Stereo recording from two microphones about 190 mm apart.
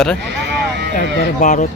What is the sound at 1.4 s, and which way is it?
Speech, 40° left (ahead or behind).